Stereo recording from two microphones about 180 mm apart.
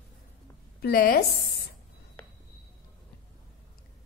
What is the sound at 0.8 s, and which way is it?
Speech, 55° left (ahead or behind).